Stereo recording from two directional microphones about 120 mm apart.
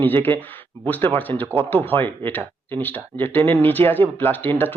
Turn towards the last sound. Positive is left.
turn(degrees=15)  # may be behind; listen again after turning